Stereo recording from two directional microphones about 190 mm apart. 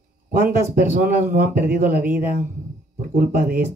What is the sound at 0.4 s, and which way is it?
A man's voice, 45° right (ahead or behind).